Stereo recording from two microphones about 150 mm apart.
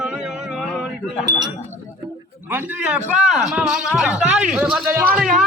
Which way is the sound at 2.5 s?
10° right (ahead or behind).